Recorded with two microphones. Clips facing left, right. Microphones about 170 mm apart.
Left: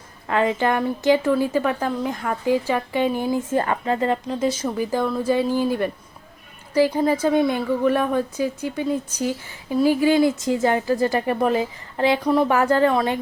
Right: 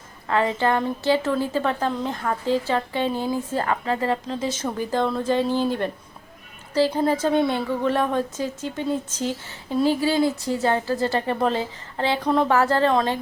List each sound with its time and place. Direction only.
0.3 s a woman's voice: 15° left (ahead or behind)